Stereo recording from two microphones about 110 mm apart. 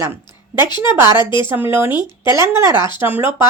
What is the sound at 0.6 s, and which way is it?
Speech, 40° left (ahead or behind).